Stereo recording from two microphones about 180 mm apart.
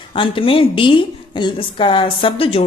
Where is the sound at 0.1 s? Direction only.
30° left (ahead or behind).